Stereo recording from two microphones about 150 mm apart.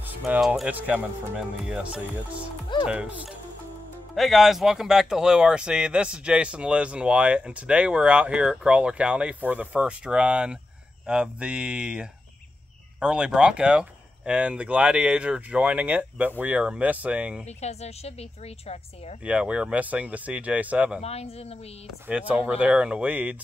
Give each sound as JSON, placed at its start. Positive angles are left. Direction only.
{"t": 0.3, "sound": "speech", "side_deg": -10}
{"t": 17.5, "sound": "a woman's voice", "side_deg": 45}
{"t": 19.2, "sound": "speech", "side_deg": -5}
{"t": 21.0, "sound": "a woman's voice", "side_deg": 45}
{"t": 22.0, "sound": "speech", "side_deg": -10}